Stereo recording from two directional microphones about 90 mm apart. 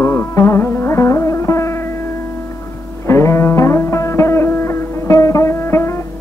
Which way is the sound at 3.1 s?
30° left (ahead or behind).